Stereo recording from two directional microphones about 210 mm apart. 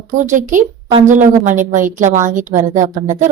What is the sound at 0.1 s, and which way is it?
A woman's voice, 35° right (ahead or behind).